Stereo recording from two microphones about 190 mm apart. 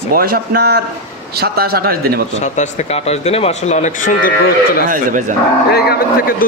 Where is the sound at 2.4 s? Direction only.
35° left (ahead or behind).